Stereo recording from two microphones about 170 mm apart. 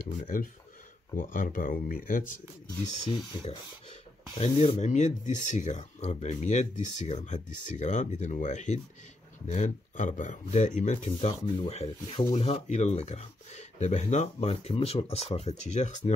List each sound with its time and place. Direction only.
0.2 s speech: 55° left (ahead or behind)
4.4 s speech: 40° left (ahead or behind)